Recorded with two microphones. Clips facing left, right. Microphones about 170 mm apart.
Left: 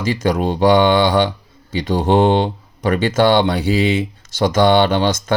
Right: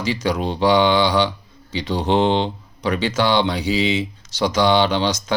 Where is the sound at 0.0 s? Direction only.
50° left (ahead or behind).